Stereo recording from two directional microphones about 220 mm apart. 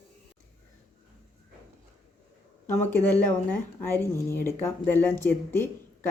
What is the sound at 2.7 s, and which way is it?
Speech, 10° left (ahead or behind).